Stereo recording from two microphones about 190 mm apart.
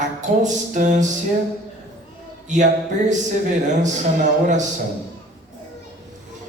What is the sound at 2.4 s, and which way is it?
Speech, 40° right (ahead or behind).